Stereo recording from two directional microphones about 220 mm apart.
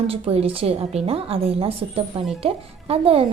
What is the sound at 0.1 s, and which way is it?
A woman's voice, 25° right (ahead or behind).